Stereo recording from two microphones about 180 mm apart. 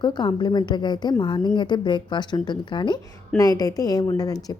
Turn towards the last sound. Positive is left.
turn(degrees=20)  # may be behind; listen again after turning